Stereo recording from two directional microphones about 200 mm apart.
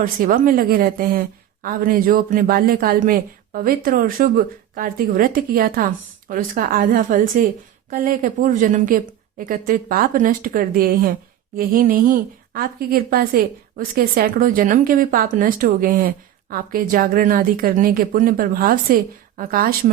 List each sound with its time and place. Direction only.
0.0 s speech: 45° right (ahead or behind)